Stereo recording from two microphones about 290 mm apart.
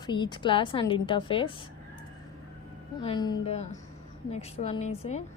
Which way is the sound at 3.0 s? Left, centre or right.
Centre.